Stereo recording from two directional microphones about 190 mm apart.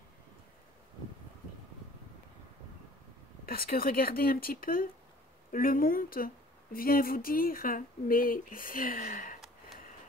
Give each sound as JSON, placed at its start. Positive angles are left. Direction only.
{"t": 3.4, "sound": "speech", "side_deg": 50}